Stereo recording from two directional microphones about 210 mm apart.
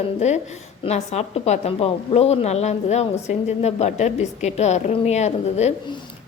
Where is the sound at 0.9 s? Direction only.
30° left (ahead or behind).